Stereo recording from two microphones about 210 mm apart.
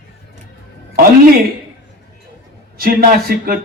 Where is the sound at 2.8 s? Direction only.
45° right (ahead or behind).